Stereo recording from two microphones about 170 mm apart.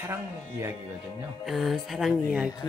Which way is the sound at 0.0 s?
15° right (ahead or behind).